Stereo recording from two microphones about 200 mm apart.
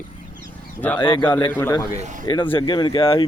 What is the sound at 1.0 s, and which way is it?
Speech, 25° left (ahead or behind).